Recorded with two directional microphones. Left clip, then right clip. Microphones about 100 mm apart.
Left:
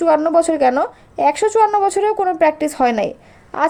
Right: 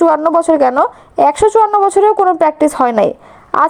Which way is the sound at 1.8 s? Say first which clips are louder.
Right 6 dB; 35° right (ahead or behind).